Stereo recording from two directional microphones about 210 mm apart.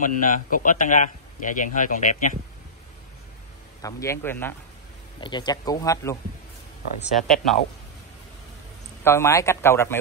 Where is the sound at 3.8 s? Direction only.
15° left (ahead or behind).